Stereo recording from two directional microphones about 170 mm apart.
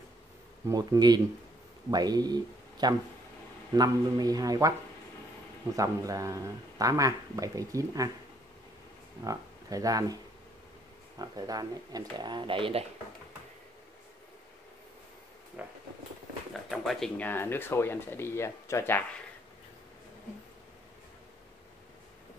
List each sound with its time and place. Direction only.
0.7 s speech: 25° right (ahead or behind)
5.8 s speech: 20° right (ahead or behind)
9.2 s speech: 20° right (ahead or behind)
11.1 s speech: 20° right (ahead or behind)
15.6 s a sound: 5° right (ahead or behind)
16.7 s speech: centre (ahead or behind)